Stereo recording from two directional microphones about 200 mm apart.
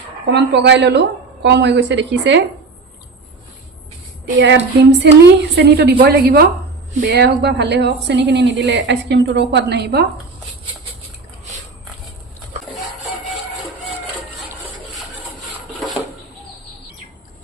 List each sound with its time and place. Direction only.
0.3 s a woman's voice: 60° right (ahead or behind)
4.4 s a woman's voice: 65° right (ahead or behind)